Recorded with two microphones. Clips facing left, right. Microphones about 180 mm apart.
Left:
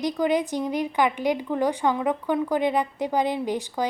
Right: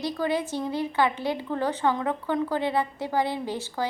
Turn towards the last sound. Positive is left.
turn(degrees=15)  # may be behind; listen again after turning